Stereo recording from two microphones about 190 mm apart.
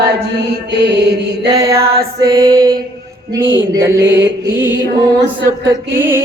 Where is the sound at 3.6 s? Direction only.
15° right (ahead or behind).